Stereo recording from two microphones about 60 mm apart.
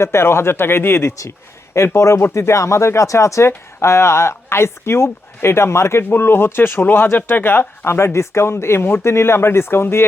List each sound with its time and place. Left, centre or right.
0.0 s speech: left
1.7 s speech: left